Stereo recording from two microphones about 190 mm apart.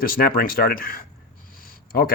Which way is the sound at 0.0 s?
50° left (ahead or behind).